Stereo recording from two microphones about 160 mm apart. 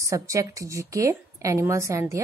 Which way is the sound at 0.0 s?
20° right (ahead or behind).